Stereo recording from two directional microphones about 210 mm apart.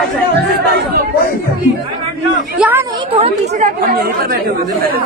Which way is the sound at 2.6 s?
10° right (ahead or behind).